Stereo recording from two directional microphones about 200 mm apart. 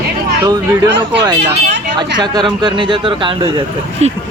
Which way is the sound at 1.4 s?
60° right (ahead or behind).